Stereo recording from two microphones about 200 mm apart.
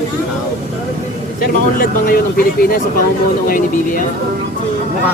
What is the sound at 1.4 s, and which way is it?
Speech, 45° left (ahead or behind).